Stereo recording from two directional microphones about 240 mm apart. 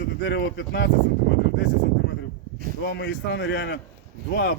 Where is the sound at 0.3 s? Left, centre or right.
Left.